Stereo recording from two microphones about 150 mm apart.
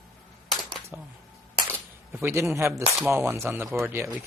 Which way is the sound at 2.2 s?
15° right (ahead or behind).